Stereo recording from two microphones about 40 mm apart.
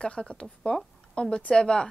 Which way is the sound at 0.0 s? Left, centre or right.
Left.